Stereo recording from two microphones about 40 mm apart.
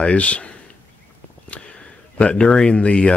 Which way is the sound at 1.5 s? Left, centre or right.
Left.